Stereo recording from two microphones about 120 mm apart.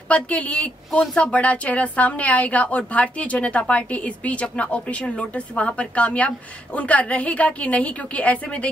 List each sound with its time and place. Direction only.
0.1 s a woman's voice: 10° left (ahead or behind)